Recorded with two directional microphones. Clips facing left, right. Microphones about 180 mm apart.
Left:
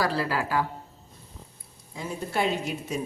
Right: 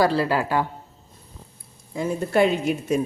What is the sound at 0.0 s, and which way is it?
Speech, 25° right (ahead or behind).